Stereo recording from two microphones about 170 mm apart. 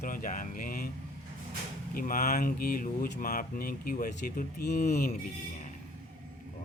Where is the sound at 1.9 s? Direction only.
55° left (ahead or behind).